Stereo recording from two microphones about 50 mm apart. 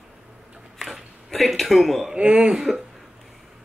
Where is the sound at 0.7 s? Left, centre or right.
Centre.